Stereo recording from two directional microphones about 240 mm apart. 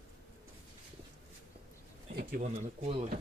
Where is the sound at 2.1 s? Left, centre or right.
Right.